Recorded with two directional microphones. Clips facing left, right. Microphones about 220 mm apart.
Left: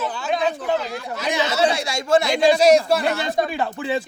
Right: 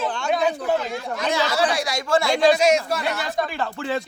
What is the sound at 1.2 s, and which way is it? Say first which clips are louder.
Speech: left 2 dB; 20° left (ahead or behind).